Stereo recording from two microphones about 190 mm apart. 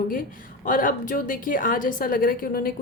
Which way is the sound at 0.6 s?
45° left (ahead or behind).